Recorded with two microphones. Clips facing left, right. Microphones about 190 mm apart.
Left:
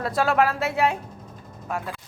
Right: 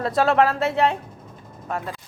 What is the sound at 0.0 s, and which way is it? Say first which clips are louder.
Speech: right 3 dB; centre (ahead or behind).